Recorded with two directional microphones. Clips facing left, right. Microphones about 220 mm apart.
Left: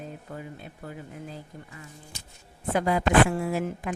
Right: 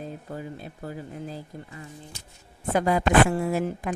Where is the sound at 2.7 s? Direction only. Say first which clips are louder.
Right 1 dB; 40° right (ahead or behind).